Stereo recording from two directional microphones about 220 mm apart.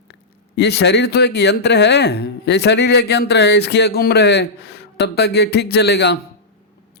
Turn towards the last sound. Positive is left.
turn(degrees=50)  # may be behind; listen again after turning